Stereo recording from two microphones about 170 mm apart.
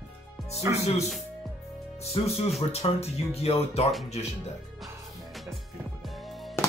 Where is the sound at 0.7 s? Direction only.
15° right (ahead or behind).